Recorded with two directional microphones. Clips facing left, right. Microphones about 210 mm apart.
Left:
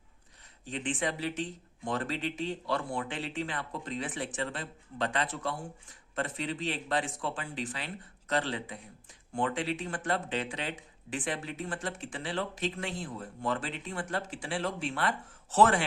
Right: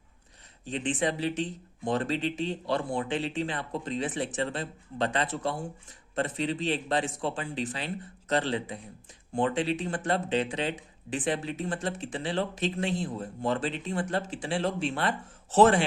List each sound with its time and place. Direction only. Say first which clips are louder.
0.7 s speech: right 4 dB; 20° right (ahead or behind)